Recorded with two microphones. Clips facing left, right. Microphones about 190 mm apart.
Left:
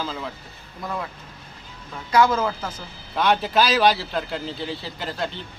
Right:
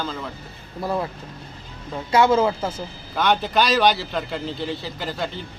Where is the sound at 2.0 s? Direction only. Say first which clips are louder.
Right 2 dB; 25° right (ahead or behind).